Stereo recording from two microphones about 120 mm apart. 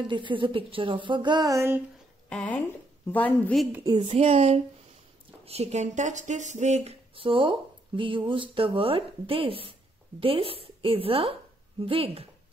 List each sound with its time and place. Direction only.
0.0 s speech: 40° right (ahead or behind); by 1.8 s 25° right (ahead or behind)
2.2 s speech: 10° left (ahead or behind)
4.0 s a woman's voice: 55° right (ahead or behind)